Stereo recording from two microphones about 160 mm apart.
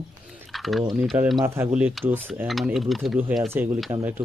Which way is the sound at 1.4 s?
15° right (ahead or behind).